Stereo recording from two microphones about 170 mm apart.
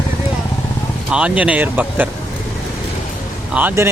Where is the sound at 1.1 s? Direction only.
5° right (ahead or behind).